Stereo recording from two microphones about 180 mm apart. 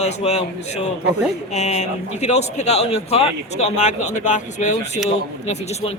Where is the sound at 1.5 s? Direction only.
40° left (ahead or behind).